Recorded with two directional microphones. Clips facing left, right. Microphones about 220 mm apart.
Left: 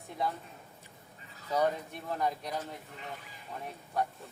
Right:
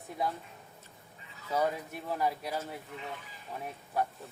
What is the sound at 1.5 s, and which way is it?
Speech, 5° right (ahead or behind).